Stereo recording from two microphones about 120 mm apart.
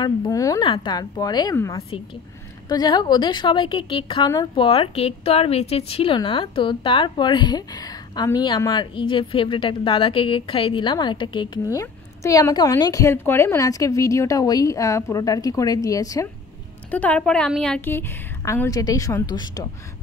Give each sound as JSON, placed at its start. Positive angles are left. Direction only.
{"t": 0.0, "sound": "a woman's voice", "side_deg": 35}
{"t": 2.7, "sound": "a woman's voice", "side_deg": 35}
{"t": 8.9, "sound": "a woman's voice", "side_deg": 45}
{"t": 11.6, "sound": "a woman's voice", "side_deg": 25}
{"t": 16.9, "sound": "a woman's voice", "side_deg": 10}
{"t": 17.8, "sound": "a woman's voice", "side_deg": 20}